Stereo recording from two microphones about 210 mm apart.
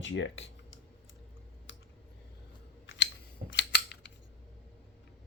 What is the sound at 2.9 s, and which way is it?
Scissors, 65° left (ahead or behind).